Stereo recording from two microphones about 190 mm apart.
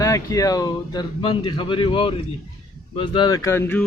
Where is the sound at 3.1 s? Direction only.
20° left (ahead or behind).